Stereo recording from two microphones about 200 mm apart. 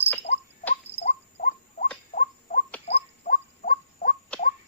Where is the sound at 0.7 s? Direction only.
40° left (ahead or behind).